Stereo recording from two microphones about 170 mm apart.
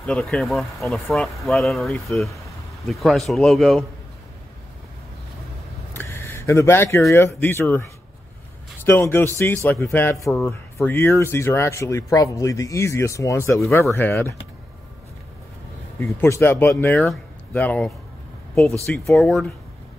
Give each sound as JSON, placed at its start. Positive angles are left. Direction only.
{"t": 0.0, "sound": "speech", "side_deg": 5}
{"t": 5.9, "sound": "a sound", "side_deg": 15}
{"t": 7.1, "sound": "speech", "side_deg": 15}
{"t": 8.8, "sound": "speech", "side_deg": 15}
{"t": 16.0, "sound": "speech", "side_deg": 15}
{"t": 19.0, "sound": "speech", "side_deg": 0}